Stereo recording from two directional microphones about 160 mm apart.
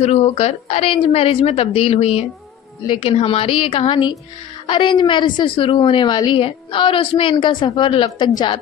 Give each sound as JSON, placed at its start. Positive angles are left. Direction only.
{"t": 0.0, "sound": "a woman's voice", "side_deg": 40}